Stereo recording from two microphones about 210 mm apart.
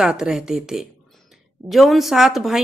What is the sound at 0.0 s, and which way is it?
A woman's voice, 5° right (ahead or behind).